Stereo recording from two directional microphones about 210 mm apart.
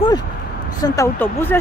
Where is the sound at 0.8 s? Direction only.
15° left (ahead or behind).